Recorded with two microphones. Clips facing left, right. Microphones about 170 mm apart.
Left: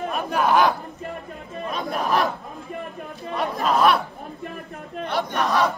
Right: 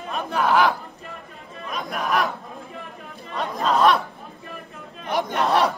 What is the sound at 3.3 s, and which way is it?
Chatter, 5° left (ahead or behind).